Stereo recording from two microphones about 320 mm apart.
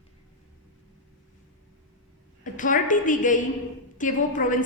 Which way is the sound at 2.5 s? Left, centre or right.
Left.